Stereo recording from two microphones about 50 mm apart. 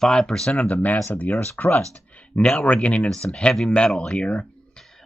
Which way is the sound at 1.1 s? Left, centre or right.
Left.